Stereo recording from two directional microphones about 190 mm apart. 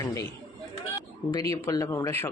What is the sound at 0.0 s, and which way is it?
Speech, 15° left (ahead or behind).